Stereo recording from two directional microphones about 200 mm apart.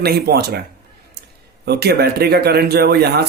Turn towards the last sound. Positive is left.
turn(degrees=-55)  # may be behind; listen again after turning